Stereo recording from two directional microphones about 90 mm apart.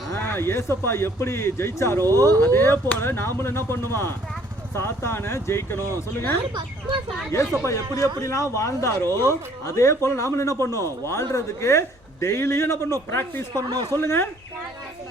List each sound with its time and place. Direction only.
0.2 s speech: 30° left (ahead or behind)
7.3 s a man's voice: 35° left (ahead or behind)
9.0 s speech: 40° right (ahead or behind)
9.3 s a man's voice: 35° left (ahead or behind)
13.5 s a man's voice: 45° right (ahead or behind)
14.0 s speech: 25° left (ahead or behind)